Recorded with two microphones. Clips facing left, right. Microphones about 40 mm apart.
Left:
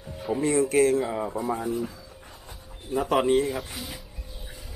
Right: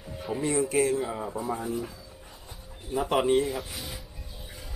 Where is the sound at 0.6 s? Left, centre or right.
Left.